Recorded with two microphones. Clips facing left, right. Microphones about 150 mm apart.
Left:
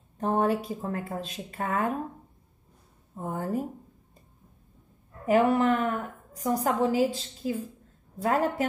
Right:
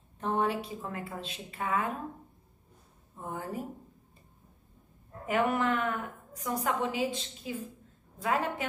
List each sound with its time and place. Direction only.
0.2 s a woman's voice: 40° left (ahead or behind)
3.2 s a woman's voice: 45° left (ahead or behind)
5.2 s a woman's voice: 35° left (ahead or behind)